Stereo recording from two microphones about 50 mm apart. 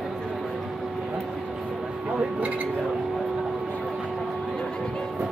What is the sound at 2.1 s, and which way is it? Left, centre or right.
Speech, right.